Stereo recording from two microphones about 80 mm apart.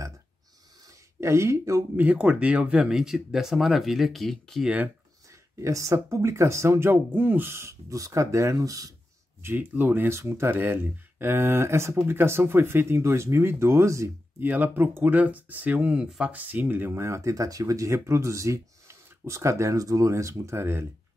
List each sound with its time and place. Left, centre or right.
1.2 s speech: right
2.0 s speech: centre
5.6 s speech: right
6.9 s speech: right
9.4 s speech: right
14.4 s speech: right